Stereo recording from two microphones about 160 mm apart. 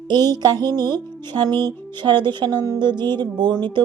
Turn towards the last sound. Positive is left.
turn(degrees=-30)  # may be behind; listen again after turning